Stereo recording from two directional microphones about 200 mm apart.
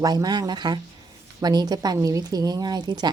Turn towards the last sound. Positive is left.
turn(degrees=-20)  # may be behind; listen again after turning